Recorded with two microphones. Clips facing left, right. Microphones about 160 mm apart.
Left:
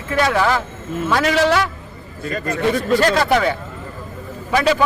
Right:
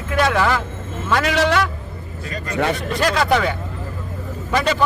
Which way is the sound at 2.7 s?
Centre (ahead or behind).